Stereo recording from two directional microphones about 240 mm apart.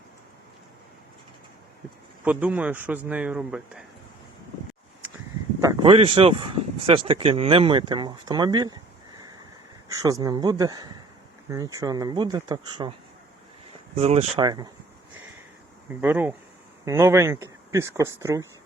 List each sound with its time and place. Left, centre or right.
2.2 s speech: centre
5.5 s speech: centre
13.9 s speech: right
15.9 s speech: centre